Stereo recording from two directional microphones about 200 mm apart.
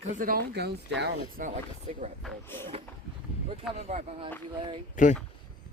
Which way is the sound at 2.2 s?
10° left (ahead or behind).